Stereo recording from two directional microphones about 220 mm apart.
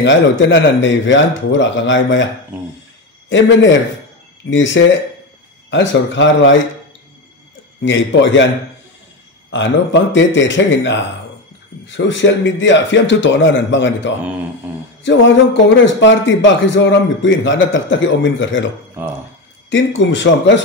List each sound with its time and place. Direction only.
0.0 s a man's voice: 55° left (ahead or behind)
3.3 s a man's voice: 55° left (ahead or behind)
7.8 s a man's voice: 55° left (ahead or behind)
9.5 s a man's voice: 55° left (ahead or behind)
19.0 s speech: 10° right (ahead or behind)
19.7 s a man's voice: 55° left (ahead or behind)